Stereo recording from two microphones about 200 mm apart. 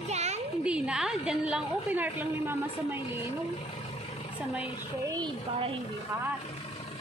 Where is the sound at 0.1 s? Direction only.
35° right (ahead or behind).